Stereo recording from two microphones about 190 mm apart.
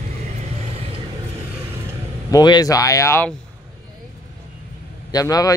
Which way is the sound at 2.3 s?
20° left (ahead or behind).